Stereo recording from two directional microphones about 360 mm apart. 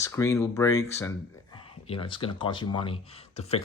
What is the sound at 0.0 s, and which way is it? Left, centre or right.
Speech, centre.